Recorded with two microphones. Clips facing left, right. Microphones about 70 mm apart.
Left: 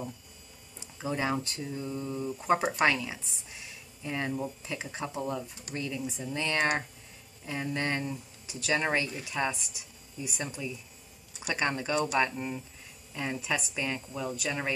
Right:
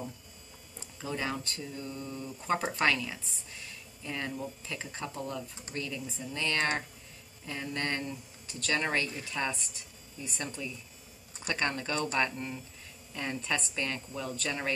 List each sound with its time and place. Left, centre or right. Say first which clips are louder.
0.7 s speech: left 4 dB; centre